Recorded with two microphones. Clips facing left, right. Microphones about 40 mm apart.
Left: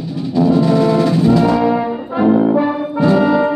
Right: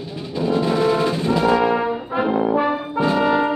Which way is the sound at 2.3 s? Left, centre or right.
Centre.